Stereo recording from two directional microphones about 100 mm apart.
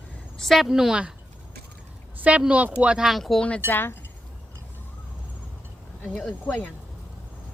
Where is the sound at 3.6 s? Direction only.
20° left (ahead or behind).